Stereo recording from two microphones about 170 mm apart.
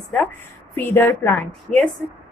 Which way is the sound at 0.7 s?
10° left (ahead or behind).